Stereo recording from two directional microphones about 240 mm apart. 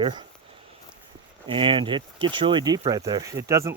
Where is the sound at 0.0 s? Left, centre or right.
Centre.